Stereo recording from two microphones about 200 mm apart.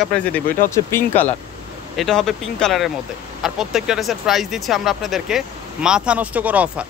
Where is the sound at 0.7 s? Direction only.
10° left (ahead or behind).